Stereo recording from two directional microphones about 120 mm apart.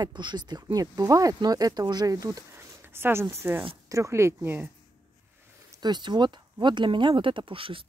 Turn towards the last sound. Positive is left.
turn(degrees=-45)  # may be behind; listen again after turning